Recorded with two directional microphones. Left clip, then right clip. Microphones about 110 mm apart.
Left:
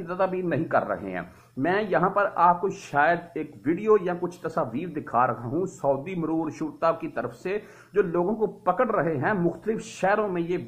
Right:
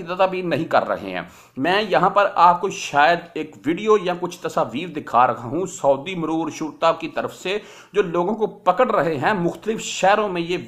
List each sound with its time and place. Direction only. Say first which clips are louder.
0.1 s speech: right 6 dB; 25° right (ahead or behind)